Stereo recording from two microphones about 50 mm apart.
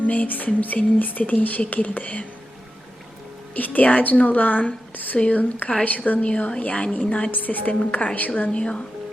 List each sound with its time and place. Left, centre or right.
0.0 s speech: left
3.5 s a woman's voice: left
7.3 s speech: left
8.4 s a woman's voice: left